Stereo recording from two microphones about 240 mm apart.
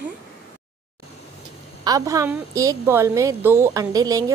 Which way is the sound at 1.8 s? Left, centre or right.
Centre.